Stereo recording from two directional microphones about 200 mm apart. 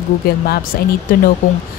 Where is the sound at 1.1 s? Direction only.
45° left (ahead or behind).